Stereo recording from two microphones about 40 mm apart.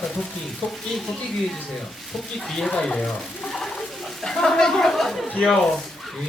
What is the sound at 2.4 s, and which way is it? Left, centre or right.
Speech, centre.